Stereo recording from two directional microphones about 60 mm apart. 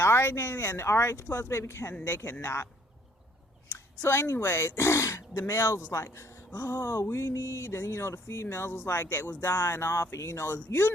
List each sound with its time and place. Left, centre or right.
0.0 s speech: left
4.0 s speech: left
4.9 s speech: left
9.0 s speech: left